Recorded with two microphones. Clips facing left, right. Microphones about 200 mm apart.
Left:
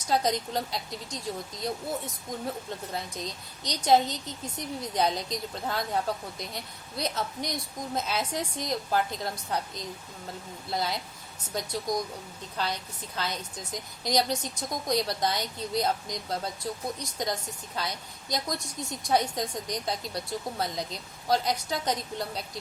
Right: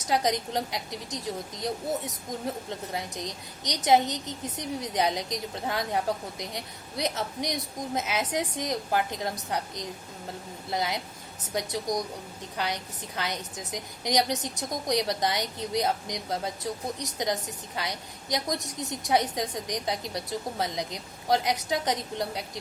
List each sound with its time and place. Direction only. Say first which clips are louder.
0.1 s a woman's voice: even; 15° right (ahead or behind)
2.9 s a woman's voice: right 1 dB; 20° right (ahead or behind)